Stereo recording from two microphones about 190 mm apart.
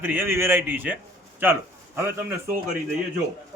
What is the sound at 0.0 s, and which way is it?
A man's voice, 10° right (ahead or behind).